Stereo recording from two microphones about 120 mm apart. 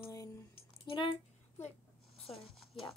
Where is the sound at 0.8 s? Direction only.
45° left (ahead or behind).